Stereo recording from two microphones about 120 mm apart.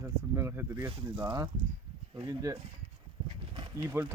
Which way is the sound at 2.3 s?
25° right (ahead or behind).